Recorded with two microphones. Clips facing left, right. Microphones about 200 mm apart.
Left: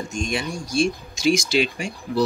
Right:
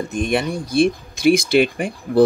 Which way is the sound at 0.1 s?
55° right (ahead or behind).